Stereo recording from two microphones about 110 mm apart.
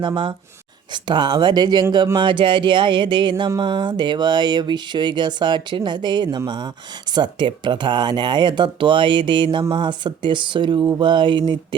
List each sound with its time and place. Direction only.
0.0 s speech: 50° right (ahead or behind)